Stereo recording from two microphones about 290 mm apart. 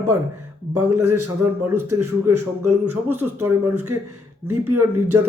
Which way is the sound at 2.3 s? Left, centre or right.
Right.